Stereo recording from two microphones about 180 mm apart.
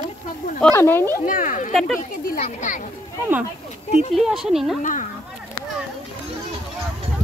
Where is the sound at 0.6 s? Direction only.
10° left (ahead or behind).